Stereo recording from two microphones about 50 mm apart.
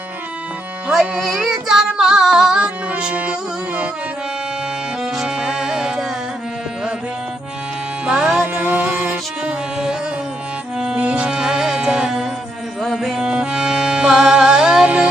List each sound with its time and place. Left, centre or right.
1.2 s female singing: centre
2.6 s music: right
5.1 s music: centre
8.0 s music: centre
8.5 s music: right
9.0 s music: right
11.3 s music: centre